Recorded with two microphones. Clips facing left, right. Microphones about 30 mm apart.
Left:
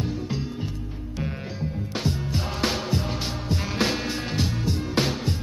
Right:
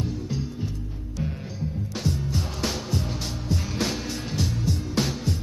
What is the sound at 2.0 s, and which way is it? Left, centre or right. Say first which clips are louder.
Music: even; left.